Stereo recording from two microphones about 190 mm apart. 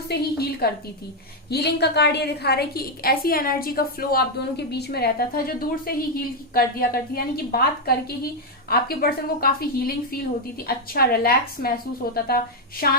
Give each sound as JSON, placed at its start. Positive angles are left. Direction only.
{"t": 0.1, "sound": "a woman's voice", "side_deg": 55}